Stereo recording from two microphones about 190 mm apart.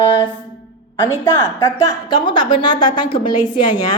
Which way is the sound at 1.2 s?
15° left (ahead or behind).